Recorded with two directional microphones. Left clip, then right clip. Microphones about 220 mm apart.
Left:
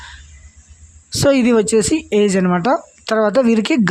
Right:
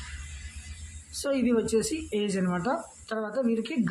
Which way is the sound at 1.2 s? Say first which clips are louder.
Left 13 dB; 45° left (ahead or behind).